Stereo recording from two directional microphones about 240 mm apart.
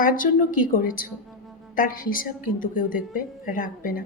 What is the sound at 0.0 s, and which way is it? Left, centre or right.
A woman's voice, left.